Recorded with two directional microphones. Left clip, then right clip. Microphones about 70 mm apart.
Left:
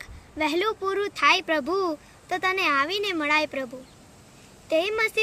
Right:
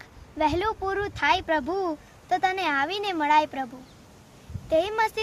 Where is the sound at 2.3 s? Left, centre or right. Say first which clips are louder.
Left 1 dB; right.